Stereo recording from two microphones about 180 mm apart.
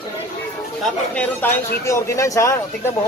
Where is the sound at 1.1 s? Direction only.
10° left (ahead or behind).